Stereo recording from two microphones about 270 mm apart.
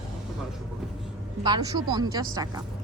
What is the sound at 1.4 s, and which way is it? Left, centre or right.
Speech, centre.